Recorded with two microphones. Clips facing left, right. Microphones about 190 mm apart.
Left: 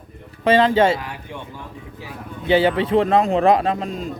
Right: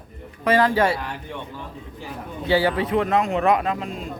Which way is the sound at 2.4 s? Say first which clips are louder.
Left 3 dB; 20° left (ahead or behind).